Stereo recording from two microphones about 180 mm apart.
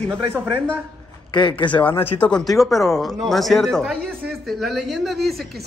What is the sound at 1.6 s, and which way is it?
Speech, 30° left (ahead or behind).